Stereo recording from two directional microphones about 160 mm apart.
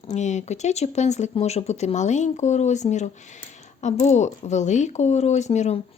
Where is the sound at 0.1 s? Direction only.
45° left (ahead or behind).